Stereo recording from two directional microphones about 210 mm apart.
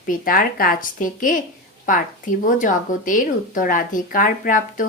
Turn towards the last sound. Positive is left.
turn(degrees=40)  # may be behind; listen again after turning